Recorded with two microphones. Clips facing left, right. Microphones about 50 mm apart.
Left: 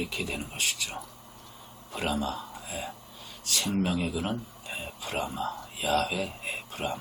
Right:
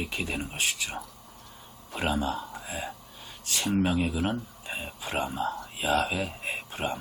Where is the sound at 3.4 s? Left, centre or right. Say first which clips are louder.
Right 2 dB; right.